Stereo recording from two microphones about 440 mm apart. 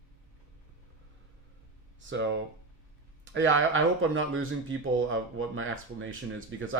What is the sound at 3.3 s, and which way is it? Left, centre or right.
Speech, right.